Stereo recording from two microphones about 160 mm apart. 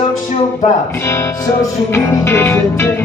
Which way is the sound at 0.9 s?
15° left (ahead or behind).